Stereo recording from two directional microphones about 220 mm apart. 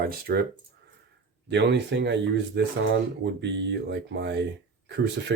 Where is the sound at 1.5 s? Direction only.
50° right (ahead or behind).